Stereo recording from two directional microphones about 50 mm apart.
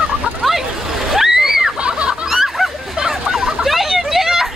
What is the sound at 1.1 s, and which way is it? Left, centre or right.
Splash, centre.